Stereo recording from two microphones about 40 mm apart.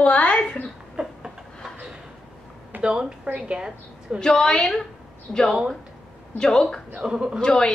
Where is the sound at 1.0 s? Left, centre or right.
Right.